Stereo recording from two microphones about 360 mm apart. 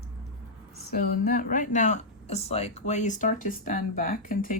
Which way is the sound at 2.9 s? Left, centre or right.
Centre.